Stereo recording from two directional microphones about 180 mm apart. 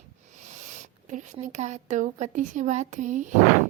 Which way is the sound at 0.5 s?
40° right (ahead or behind).